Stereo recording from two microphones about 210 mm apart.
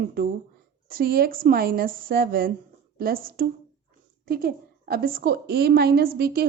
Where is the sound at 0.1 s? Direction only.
45° right (ahead or behind).